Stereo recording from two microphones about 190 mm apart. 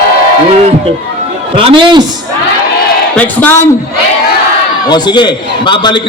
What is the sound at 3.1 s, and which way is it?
Speech, 10° left (ahead or behind).